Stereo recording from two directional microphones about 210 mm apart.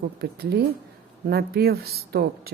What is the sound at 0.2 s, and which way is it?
Speech, 50° right (ahead or behind).